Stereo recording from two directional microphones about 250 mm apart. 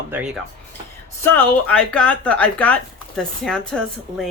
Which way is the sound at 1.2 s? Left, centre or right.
Centre.